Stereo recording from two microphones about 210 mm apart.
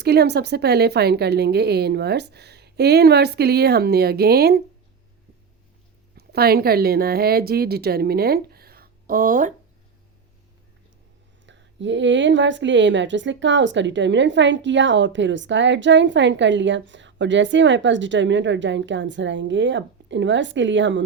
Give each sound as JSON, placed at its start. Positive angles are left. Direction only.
{"t": 0.0, "sound": "speech", "side_deg": -50}
{"t": 6.1, "sound": "a woman's voice", "side_deg": -50}
{"t": 11.4, "sound": "a woman's voice", "side_deg": -60}